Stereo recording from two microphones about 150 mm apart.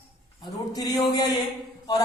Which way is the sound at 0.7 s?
25° left (ahead or behind).